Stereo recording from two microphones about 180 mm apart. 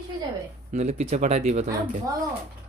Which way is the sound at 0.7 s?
40° right (ahead or behind).